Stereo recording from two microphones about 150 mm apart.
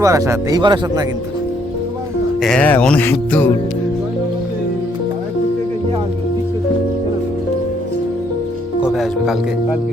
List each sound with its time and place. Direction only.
0.0 s speech: 20° right (ahead or behind)
2.4 s speech: 5° left (ahead or behind)
8.8 s speech: centre (ahead or behind)